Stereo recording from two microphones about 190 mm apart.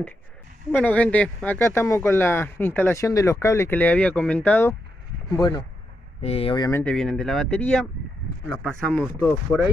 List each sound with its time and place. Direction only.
0.7 s speech: 10° left (ahead or behind)
6.2 s speech: 30° left (ahead or behind)
6.7 s speech: 5° left (ahead or behind)